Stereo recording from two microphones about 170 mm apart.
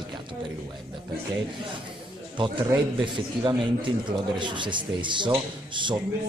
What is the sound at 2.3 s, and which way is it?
Speech, 30° right (ahead or behind).